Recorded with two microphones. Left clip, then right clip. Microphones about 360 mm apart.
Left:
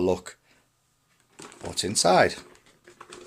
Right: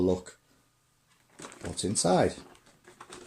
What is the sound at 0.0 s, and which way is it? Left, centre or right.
Speech, left.